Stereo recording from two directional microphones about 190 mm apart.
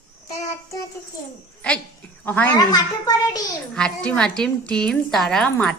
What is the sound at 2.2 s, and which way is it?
Speech, 10° left (ahead or behind).